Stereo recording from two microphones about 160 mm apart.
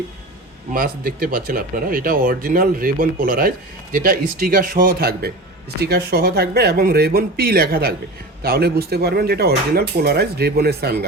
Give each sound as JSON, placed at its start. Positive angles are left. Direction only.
{"t": 0.7, "sound": "speech", "side_deg": -65}
{"t": 5.8, "sound": "speech", "side_deg": -85}